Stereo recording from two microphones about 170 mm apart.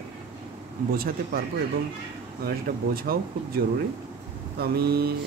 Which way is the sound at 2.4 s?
60° right (ahead or behind).